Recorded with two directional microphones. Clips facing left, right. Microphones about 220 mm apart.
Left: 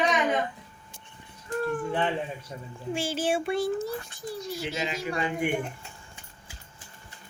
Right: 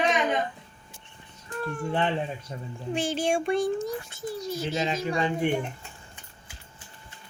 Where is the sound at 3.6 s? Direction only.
15° right (ahead or behind).